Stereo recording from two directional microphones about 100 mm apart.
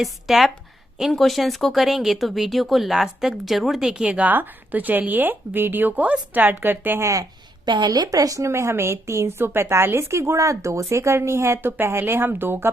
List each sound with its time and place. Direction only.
0.0 s speech: centre (ahead or behind); by 7.1 s 20° right (ahead or behind)
7.1 s a woman's voice: 40° right (ahead or behind); by 12.7 s 20° right (ahead or behind)